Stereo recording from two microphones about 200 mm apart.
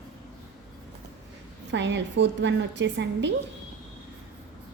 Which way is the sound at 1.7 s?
65° right (ahead or behind).